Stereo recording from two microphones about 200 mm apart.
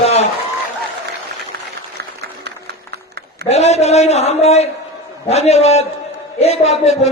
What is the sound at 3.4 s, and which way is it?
A man's voice, 35° left (ahead or behind).